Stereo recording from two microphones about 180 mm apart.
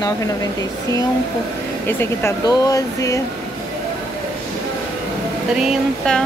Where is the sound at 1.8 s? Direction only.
15° left (ahead or behind).